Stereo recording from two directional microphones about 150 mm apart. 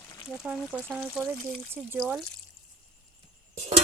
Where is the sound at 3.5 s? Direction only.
45° right (ahead or behind).